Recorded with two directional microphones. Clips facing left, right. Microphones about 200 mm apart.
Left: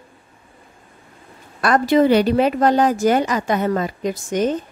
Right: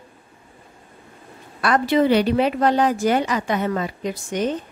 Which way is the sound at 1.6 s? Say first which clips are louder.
Left 3 dB; 45° left (ahead or behind).